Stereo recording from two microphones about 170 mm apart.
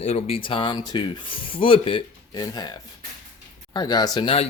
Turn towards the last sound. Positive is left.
turn(degrees=35)  # may be behind; listen again after turning